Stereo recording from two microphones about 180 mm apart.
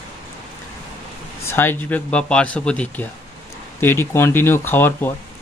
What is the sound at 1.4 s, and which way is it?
A man's voice, 10° left (ahead or behind).